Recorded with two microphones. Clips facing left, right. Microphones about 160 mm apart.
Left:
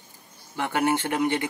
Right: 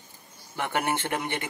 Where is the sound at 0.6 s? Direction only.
15° right (ahead or behind).